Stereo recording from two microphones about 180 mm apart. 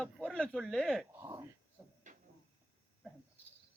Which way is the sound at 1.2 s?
20° right (ahead or behind).